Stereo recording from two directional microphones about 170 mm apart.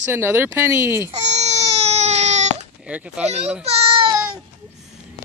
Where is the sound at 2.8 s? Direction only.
5° right (ahead or behind).